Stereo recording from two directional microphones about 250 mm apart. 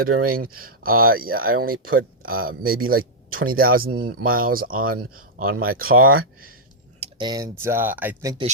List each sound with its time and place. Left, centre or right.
0.3 s speech: right
7.0 s speech: centre